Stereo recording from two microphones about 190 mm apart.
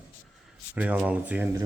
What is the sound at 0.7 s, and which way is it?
Speech, 10° right (ahead or behind).